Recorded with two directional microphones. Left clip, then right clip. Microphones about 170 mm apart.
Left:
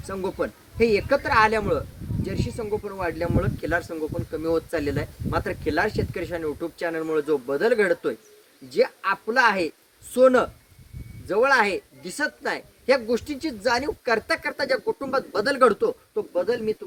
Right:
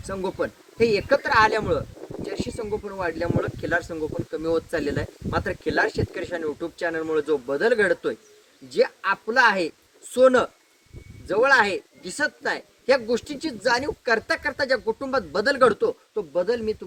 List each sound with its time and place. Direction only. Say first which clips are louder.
0.1 s speech: even; 20° left (ahead or behind)